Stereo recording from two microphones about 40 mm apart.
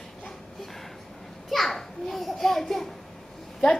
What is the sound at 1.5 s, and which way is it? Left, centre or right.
Children playing, centre.